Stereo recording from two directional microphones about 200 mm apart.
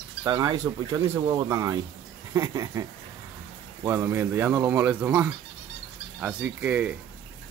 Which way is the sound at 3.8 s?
15° right (ahead or behind).